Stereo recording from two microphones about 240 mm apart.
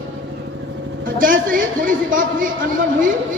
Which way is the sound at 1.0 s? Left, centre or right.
Right.